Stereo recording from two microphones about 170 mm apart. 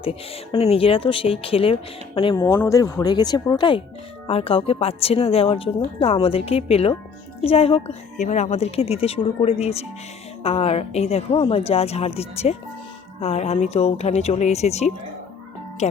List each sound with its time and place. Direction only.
0.0 s a woman's voice: 35° left (ahead or behind)
2.4 s a woman's voice: 15° left (ahead or behind); by 16.0 s 40° left (ahead or behind)